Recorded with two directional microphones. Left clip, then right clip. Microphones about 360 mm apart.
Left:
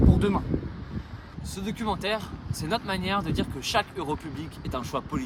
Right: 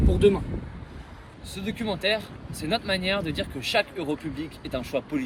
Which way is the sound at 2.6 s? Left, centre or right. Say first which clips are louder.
Right 3 dB; left.